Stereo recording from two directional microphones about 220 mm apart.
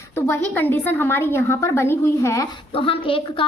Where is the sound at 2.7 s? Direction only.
25° left (ahead or behind).